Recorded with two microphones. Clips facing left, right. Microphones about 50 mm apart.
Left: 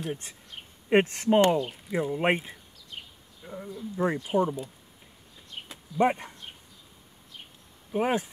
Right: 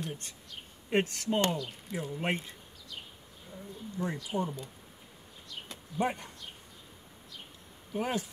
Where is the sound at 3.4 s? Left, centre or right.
Left.